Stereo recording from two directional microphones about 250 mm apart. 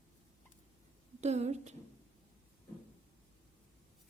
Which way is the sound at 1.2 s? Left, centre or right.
Right.